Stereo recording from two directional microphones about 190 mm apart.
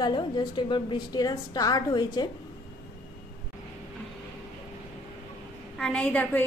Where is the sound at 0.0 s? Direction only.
25° left (ahead or behind).